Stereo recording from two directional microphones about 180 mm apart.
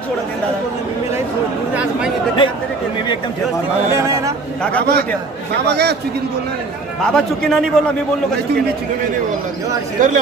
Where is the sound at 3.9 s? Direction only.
15° right (ahead or behind).